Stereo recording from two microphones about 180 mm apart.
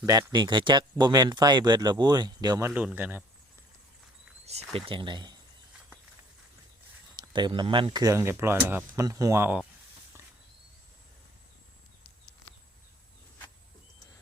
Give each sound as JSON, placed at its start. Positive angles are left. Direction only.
{"t": 0.0, "sound": "speech", "side_deg": -20}
{"t": 4.4, "sound": "speech", "side_deg": -35}
{"t": 7.2, "sound": "speech", "side_deg": -25}